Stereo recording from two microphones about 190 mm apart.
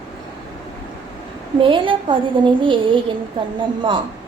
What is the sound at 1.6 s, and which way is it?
A woman's voice, 25° right (ahead or behind).